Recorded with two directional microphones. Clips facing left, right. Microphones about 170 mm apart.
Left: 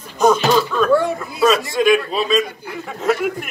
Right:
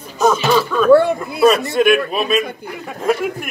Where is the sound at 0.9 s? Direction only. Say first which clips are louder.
Right 5 dB; 65° right (ahead or behind).